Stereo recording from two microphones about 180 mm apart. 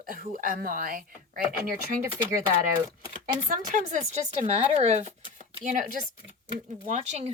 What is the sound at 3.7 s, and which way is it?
A woman's voice, 45° right (ahead or behind).